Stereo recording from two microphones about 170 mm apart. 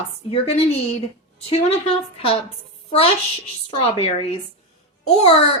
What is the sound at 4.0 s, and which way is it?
Speech, 35° left (ahead or behind).